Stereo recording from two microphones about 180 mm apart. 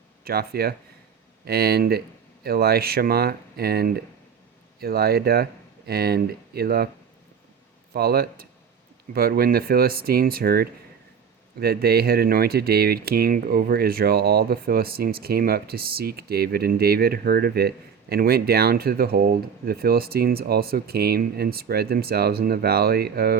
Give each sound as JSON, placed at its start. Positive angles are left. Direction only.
{"t": 0.3, "sound": "speech", "side_deg": -60}
{"t": 7.9, "sound": "speech", "side_deg": -60}